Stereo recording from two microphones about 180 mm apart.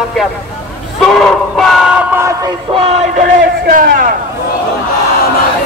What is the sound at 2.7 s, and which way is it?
Music, 35° right (ahead or behind).